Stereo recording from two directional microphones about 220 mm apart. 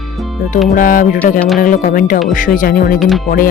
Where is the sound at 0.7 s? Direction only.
40° left (ahead or behind).